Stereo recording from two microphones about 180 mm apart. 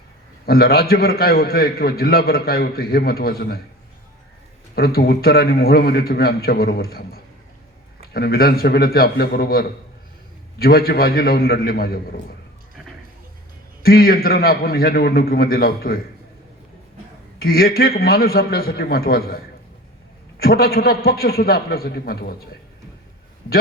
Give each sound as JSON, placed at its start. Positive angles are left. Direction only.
{"t": 0.4, "sound": "a man's voice", "side_deg": 60}
{"t": 4.7, "sound": "a man's voice", "side_deg": 60}
{"t": 13.8, "sound": "a man's voice", "side_deg": 55}
{"t": 17.4, "sound": "a man's voice", "side_deg": 55}
{"t": 20.4, "sound": "a man's voice", "side_deg": 55}